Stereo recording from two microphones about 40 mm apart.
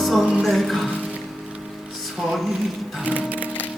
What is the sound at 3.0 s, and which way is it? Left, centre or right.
Music, right.